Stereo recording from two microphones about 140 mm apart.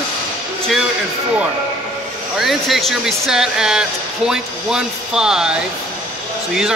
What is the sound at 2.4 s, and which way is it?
Speech, centre (ahead or behind).